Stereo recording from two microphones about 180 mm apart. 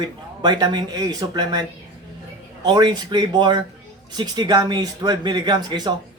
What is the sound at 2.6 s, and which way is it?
Speech, 25° right (ahead or behind).